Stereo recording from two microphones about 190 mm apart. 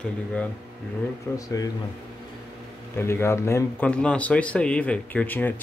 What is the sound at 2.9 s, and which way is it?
Speech, 15° left (ahead or behind).